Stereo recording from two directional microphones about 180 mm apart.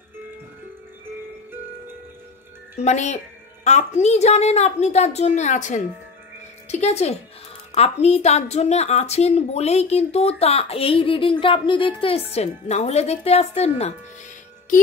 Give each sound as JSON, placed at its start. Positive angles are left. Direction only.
{"t": 2.8, "sound": "a woman's voice", "side_deg": 40}